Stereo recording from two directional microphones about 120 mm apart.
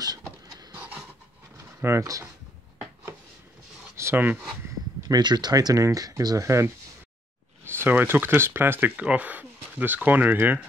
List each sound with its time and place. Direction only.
0.5 s pant: 30° right (ahead or behind)
0.7 s pant: 10° right (ahead or behind)
1.8 s speech: 25° right (ahead or behind)
3.9 s a sound: 20° right (ahead or behind)
5.0 s speech: 35° right (ahead or behind)
7.7 s speech: 15° right (ahead or behind)